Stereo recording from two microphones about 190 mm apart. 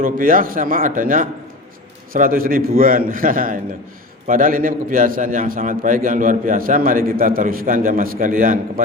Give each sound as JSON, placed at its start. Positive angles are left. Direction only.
{"t": 0.0, "sound": "a man's voice", "side_deg": -45}